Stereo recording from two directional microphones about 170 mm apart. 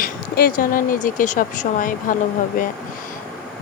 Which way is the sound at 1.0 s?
50° left (ahead or behind).